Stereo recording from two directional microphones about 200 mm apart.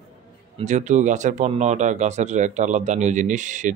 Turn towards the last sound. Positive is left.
turn(degrees=-40)  # may be behind; listen again after turning